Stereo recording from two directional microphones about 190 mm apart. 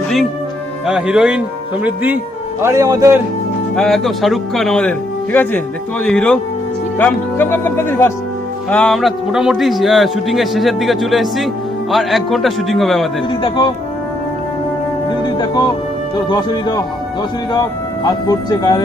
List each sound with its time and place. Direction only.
0.9 s a man's voice: 5° right (ahead or behind)
3.8 s a man's voice: centre (ahead or behind)
13.4 s speech: 25° left (ahead or behind)
16.1 s speech: 25° left (ahead or behind)